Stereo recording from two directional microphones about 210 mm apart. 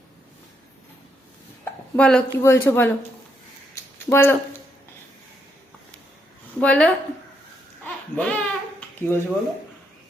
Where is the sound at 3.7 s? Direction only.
10° left (ahead or behind).